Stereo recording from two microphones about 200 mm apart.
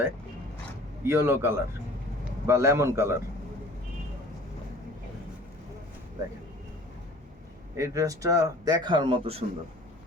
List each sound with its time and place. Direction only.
1.0 s a man's voice: 10° right (ahead or behind)
7.8 s speech: 15° right (ahead or behind)